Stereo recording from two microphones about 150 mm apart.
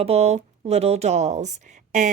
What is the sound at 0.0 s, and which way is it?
Speech, 45° right (ahead or behind).